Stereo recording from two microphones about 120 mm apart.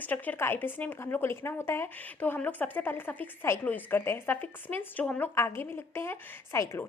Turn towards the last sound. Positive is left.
turn(degrees=20)  # may be behind; listen again after turning